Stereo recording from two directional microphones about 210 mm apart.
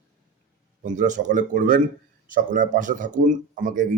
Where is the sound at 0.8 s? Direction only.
35° right (ahead or behind).